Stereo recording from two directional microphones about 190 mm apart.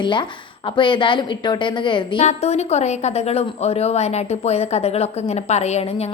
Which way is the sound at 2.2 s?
35° left (ahead or behind).